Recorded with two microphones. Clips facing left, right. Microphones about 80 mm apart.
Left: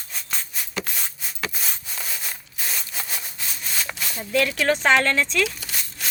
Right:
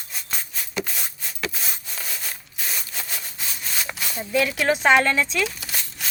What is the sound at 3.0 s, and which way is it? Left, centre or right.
Sawing, centre.